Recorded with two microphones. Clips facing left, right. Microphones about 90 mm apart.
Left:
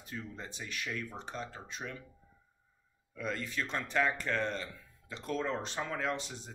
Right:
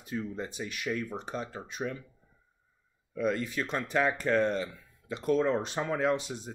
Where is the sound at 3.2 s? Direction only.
15° right (ahead or behind).